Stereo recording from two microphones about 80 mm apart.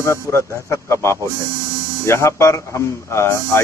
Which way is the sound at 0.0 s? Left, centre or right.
Left.